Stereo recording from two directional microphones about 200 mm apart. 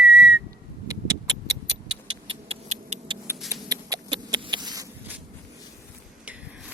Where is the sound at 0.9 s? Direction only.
15° right (ahead or behind).